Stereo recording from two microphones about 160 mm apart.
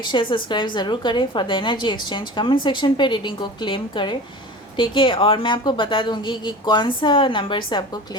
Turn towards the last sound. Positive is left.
turn(degrees=30)  # may be behind; listen again after turning